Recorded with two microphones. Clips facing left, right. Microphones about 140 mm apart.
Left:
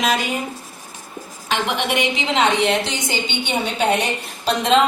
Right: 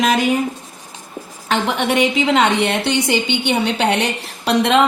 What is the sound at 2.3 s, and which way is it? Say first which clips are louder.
A woman's voice: left 2 dB; 65° right (ahead or behind).